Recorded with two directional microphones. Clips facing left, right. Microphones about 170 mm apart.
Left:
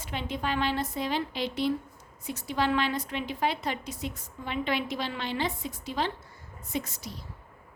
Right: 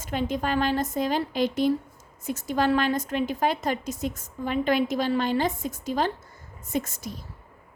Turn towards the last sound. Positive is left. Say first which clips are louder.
# right 5 dB
turn(degrees=-50)  # may be behind; listen again after turning